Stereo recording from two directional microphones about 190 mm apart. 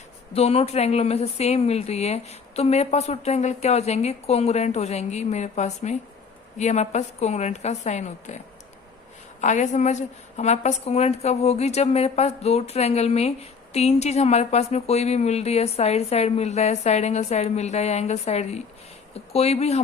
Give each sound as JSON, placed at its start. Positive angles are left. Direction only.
{"t": 0.3, "sound": "a woman's voice", "side_deg": 30}
{"t": 9.4, "sound": "a woman's voice", "side_deg": 40}